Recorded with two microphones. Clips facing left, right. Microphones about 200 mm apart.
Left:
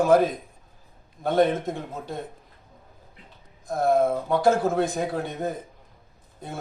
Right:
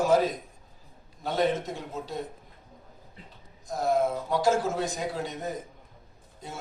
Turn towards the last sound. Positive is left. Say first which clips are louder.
# left 4 dB
turn(degrees=55)  # may be behind; listen again after turning